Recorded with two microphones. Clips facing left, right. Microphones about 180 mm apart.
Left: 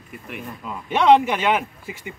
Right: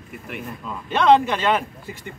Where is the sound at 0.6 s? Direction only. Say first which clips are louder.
Left 1 dB; 15° left (ahead or behind).